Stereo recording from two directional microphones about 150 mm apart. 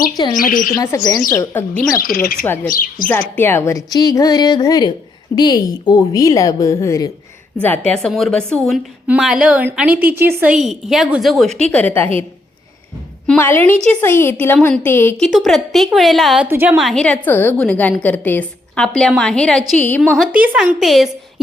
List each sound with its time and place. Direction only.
0.3 s a woman's voice: 70° left (ahead or behind)
0.8 s a woman's voice: 25° left (ahead or behind)
2.0 s a woman's voice: 75° left (ahead or behind)
3.1 s speech: 15° left (ahead or behind)
7.6 s a woman's voice: 10° left (ahead or behind)
13.2 s a woman's voice: 10° left (ahead or behind)
15.2 s a woman's voice: centre (ahead or behind)
20.1 s speech: 10° right (ahead or behind)
20.7 s a woman's voice: centre (ahead or behind)